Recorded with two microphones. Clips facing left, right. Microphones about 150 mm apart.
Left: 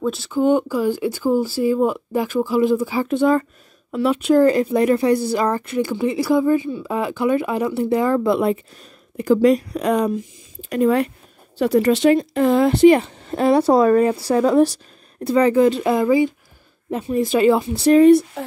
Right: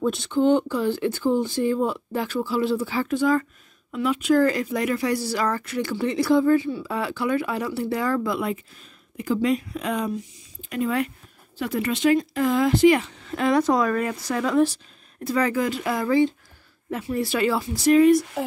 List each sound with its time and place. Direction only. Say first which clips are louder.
0.0 s speech: left 2 dB; centre (ahead or behind)
3.1 s speech: left 5 dB; 25° left (ahead or behind)
5.8 s speech: left 3 dB; 15° left (ahead or behind); by 8.5 s 30° left (ahead or behind)
9.4 s speech: left 8 dB; 40° left (ahead or behind); by 16.3 s 15° left (ahead or behind)
16.9 s speech: left 6 dB; 25° left (ahead or behind)
17.8 s speech: left 4 dB; 35° left (ahead or behind)